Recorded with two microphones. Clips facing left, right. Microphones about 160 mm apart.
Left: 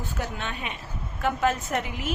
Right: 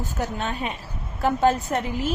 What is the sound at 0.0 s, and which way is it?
A woman's voice, 35° right (ahead or behind).